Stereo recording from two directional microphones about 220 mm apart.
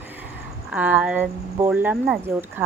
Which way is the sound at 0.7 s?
5° right (ahead or behind).